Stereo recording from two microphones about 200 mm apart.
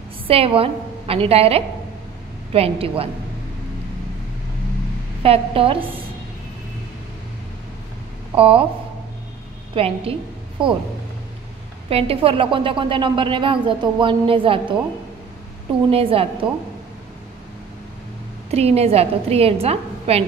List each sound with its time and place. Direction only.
0.3 s a woman's voice: 30° right (ahead or behind)
5.2 s a woman's voice: 30° right (ahead or behind)
8.4 s a woman's voice: 30° right (ahead or behind)
9.8 s a woman's voice: 30° right (ahead or behind)
11.9 s a woman's voice: 30° right (ahead or behind)
15.9 s a woman's voice: 30° right (ahead or behind)
18.5 s a woman's voice: 30° right (ahead or behind)